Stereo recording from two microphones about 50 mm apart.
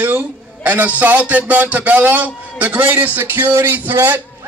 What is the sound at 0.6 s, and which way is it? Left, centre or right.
A man's voice, right.